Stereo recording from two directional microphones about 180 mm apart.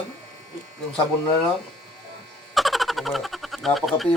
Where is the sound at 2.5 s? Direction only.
Centre (ahead or behind).